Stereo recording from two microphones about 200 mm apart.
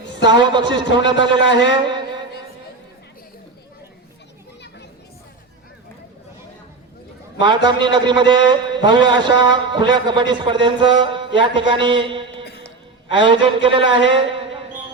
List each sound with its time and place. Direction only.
0.2 s a man's voice: 25° right (ahead or behind)
1.5 s a man's voice: 60° left (ahead or behind)
1.7 s mantra: 20° right (ahead or behind)
7.3 s a man's voice: 25° right (ahead or behind)
14.1 s a sound: 25° right (ahead or behind)